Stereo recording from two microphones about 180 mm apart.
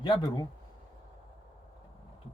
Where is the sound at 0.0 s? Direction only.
25° left (ahead or behind).